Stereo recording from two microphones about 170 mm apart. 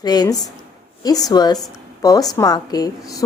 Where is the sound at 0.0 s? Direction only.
25° left (ahead or behind).